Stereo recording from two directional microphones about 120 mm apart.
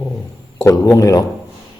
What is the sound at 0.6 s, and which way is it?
Speech, 25° left (ahead or behind).